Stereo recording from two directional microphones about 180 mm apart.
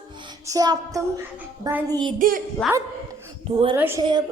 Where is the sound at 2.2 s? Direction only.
50° right (ahead or behind).